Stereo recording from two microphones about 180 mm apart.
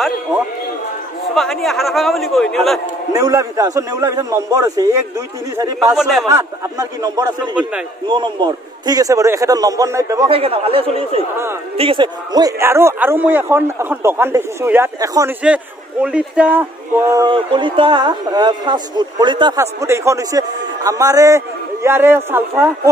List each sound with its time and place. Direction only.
1.3 s a man's voice: centre (ahead or behind)
3.1 s a man's voice: 20° right (ahead or behind)
5.9 s a man's voice: centre (ahead or behind)
6.2 s a man's voice: 20° right (ahead or behind)
10.3 s a man's voice: 30° right (ahead or behind); by 16.6 s 10° right (ahead or behind)
17.1 s a man's voice: 25° right (ahead or behind)